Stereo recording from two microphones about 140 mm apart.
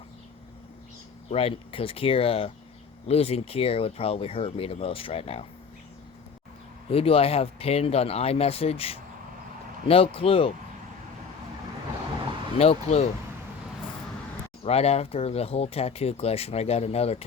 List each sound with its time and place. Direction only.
1.3 s speech: 40° left (ahead or behind)
6.9 s speech: 45° left (ahead or behind)
12.5 s speech: 50° left (ahead or behind)
14.6 s speech: 45° left (ahead or behind)